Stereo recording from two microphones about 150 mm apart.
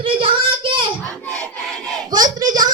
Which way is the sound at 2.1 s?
25° right (ahead or behind).